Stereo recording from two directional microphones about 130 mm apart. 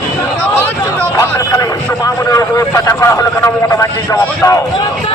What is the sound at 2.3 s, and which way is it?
Vehicle, 25° left (ahead or behind).